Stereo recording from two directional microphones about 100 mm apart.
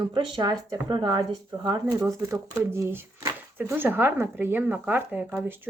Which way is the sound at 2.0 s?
30° right (ahead or behind).